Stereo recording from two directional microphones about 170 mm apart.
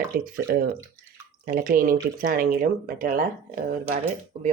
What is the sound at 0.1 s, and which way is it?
Speech, 60° right (ahead or behind).